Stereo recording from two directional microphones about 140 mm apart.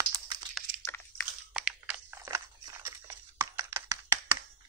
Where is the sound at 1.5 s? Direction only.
5° right (ahead or behind).